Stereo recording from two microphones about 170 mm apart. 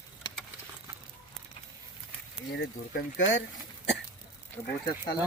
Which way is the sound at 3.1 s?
90° left.